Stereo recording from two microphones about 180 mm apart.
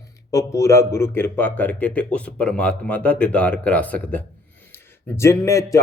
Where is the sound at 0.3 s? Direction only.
20° left (ahead or behind).